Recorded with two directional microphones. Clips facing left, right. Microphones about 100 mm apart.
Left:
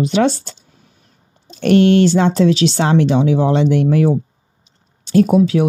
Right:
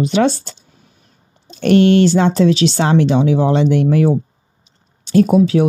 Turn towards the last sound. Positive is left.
turn(degrees=-35)  # may be behind; listen again after turning